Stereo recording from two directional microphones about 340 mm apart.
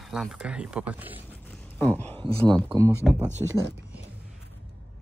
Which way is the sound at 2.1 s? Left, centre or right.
Centre.